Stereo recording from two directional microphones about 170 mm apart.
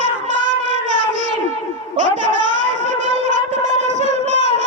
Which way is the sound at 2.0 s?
45° right (ahead or behind).